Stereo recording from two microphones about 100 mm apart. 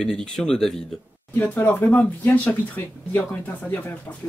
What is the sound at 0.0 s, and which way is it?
Speech, 5° left (ahead or behind).